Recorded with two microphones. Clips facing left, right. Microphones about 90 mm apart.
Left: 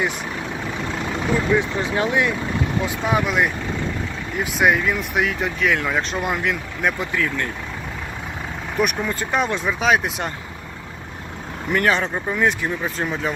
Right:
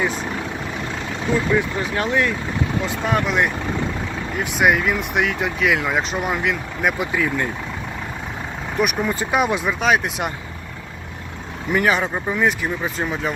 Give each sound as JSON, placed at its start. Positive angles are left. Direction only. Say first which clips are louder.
{"t": 1.5, "sound": "speech", "louder": "even", "side_deg": 20}
{"t": 2.8, "sound": "speech", "louder": "even", "side_deg": 5}
{"t": 7.0, "sound": "speech", "louder": "right 2 dB", "side_deg": -15}
{"t": 8.7, "sound": "speech", "louder": "right 1 dB", "side_deg": -5}
{"t": 11.7, "sound": "speech", "louder": "right 1 dB", "side_deg": -5}